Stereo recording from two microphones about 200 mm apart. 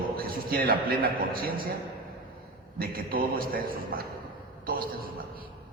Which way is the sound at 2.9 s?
45° right (ahead or behind).